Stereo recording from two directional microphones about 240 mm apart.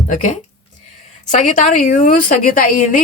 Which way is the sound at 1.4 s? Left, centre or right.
Left.